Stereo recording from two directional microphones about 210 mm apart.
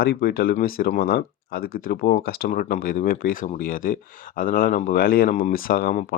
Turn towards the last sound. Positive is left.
turn(degrees=45)  # may be behind; listen again after turning